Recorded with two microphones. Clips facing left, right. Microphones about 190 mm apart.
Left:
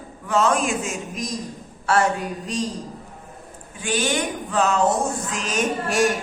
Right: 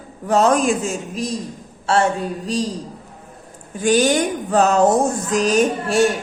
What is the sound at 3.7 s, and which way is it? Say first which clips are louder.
Speech: right 8 dB; 40° right (ahead or behind).